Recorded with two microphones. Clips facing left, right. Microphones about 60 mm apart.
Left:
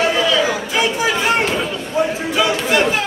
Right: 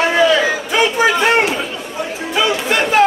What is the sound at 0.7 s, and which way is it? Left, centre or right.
Chatter, right.